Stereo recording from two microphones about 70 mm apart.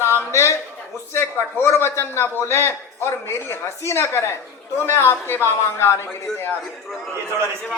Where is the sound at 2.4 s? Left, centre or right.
Left.